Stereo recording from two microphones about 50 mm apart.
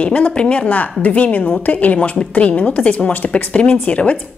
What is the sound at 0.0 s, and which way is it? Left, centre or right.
A woman's voice, left.